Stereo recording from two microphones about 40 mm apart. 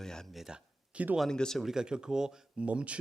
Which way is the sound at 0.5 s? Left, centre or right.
Centre.